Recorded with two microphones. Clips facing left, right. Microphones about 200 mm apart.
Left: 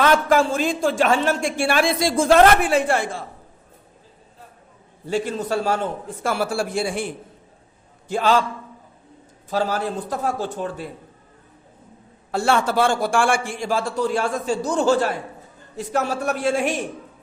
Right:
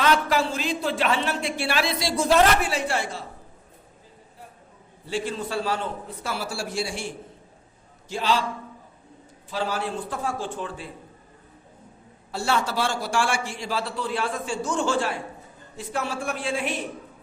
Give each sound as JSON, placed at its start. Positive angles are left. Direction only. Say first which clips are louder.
{"t": 0.0, "sound": "a man's voice", "louder": "left 5 dB", "side_deg": 50}
{"t": 5.0, "sound": "a man's voice", "louder": "left 5 dB", "side_deg": 45}
{"t": 8.1, "sound": "a man's voice", "louder": "left 6 dB", "side_deg": 50}
{"t": 9.5, "sound": "a man's voice", "louder": "left 5 dB", "side_deg": 45}
{"t": 12.3, "sound": "a man's voice", "louder": "left 6 dB", "side_deg": 50}